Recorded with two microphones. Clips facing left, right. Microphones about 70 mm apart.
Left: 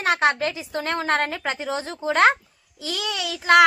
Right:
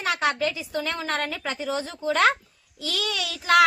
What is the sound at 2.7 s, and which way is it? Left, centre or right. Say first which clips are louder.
Speech: left 1 dB; centre.